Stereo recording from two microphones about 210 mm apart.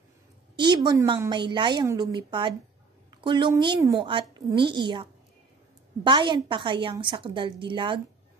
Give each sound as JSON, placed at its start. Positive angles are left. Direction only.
{"t": 0.6, "sound": "a woman's voice", "side_deg": -20}
{"t": 6.0, "sound": "a woman's voice", "side_deg": -20}